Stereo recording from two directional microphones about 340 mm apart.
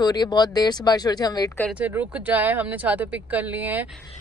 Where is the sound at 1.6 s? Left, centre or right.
Centre.